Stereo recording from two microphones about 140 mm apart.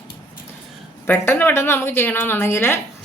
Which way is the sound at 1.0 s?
15° left (ahead or behind).